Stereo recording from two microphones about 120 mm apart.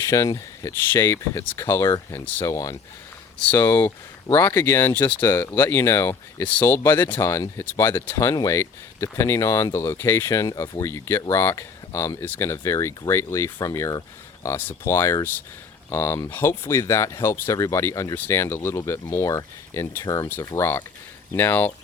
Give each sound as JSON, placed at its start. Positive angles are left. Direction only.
{"t": 0.1, "sound": "speech", "side_deg": 25}